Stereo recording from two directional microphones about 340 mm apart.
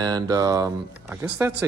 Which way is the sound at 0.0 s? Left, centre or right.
Centre.